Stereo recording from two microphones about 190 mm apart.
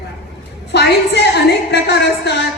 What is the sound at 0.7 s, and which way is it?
A woman's voice, 60° left (ahead or behind).